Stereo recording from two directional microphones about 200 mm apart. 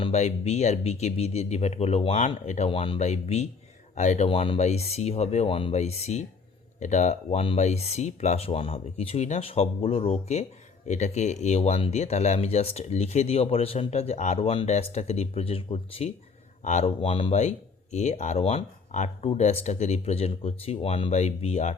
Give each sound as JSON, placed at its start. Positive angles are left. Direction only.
{"t": 0.0, "sound": "speech", "side_deg": 35}